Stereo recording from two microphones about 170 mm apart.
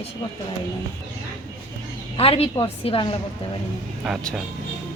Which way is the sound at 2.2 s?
35° left (ahead or behind).